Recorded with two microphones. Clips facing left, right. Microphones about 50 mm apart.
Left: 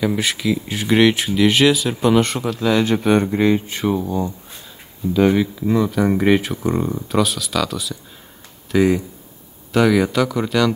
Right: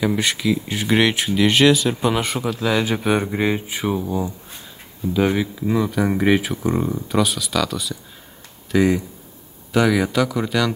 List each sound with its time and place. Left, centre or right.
0.0 s speech: centre